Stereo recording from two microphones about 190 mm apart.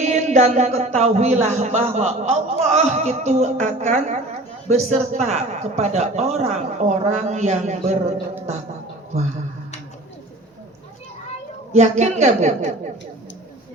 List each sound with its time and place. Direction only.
0.0 s speech: 35° right (ahead or behind)
11.7 s speech: 35° right (ahead or behind)